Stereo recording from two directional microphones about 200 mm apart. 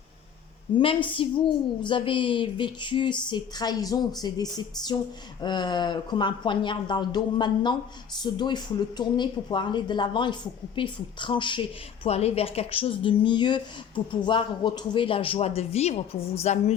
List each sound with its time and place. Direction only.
0.8 s speech: 25° left (ahead or behind)